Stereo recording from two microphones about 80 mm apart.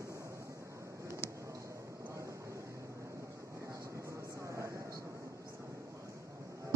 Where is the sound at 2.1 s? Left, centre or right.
Right.